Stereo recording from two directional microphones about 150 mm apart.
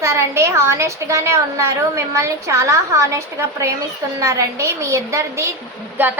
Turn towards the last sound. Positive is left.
turn(degrees=-10)  # may be behind; listen again after turning